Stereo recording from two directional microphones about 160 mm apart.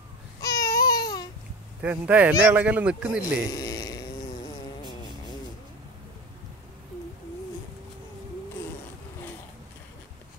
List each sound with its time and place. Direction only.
0.4 s baby cry: 20° left (ahead or behind)
1.8 s a man's voice: 10° right (ahead or behind)
3.4 s a sound: 20° left (ahead or behind)